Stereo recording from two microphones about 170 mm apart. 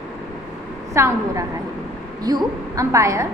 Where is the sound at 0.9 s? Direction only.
15° right (ahead or behind).